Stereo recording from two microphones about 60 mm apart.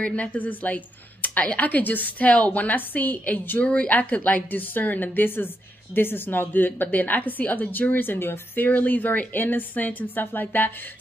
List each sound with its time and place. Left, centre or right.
0.0 s a woman's voice: left
8.6 s speech: left